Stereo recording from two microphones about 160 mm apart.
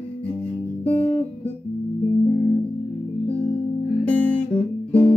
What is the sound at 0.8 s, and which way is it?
Guitar, 10° left (ahead or behind).